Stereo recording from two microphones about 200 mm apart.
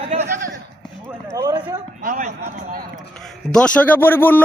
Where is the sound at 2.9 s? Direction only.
Centre (ahead or behind).